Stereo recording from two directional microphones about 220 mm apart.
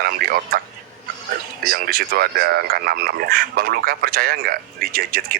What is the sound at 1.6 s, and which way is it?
Speech, 40° right (ahead or behind).